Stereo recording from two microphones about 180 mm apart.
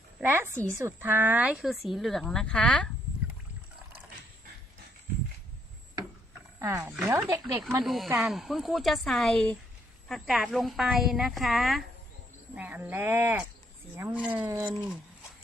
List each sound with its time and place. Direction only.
0.2 s speech: 10° right (ahead or behind); by 2.9 s 5° left (ahead or behind)
6.6 s speech: 15° right (ahead or behind)
7.9 s speech: centre (ahead or behind); by 14.8 s 15° right (ahead or behind)